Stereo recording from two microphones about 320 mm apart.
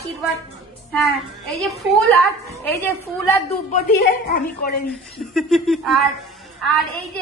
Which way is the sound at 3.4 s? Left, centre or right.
Left.